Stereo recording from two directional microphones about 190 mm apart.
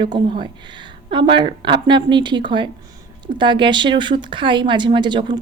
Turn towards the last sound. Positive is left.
turn(degrees=-25)  # may be behind; listen again after turning